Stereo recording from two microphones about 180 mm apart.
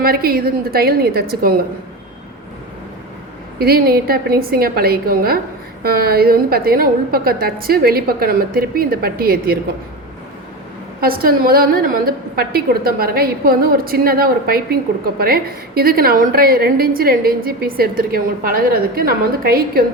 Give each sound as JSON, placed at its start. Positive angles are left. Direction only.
{"t": 0.0, "sound": "a woman's voice", "side_deg": -55}
{"t": 3.6, "sound": "a woman's voice", "side_deg": -55}
{"t": 11.0, "sound": "a woman's voice", "side_deg": -55}